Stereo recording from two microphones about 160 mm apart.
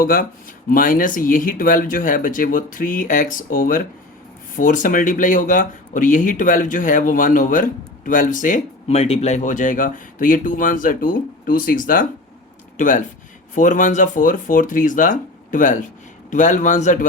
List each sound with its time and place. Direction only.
0.0 s a man's voice: 60° left (ahead or behind)